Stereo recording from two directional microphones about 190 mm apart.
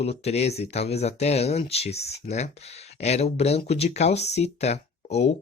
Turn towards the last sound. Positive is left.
turn(degrees=35)  # may be behind; listen again after turning